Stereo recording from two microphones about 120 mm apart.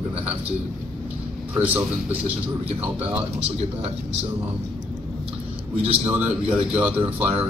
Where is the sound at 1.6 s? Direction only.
15° right (ahead or behind).